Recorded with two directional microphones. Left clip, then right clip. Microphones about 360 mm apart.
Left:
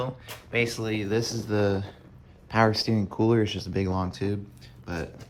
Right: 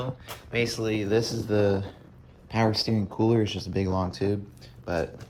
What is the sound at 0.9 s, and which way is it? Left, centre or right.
Speech, centre.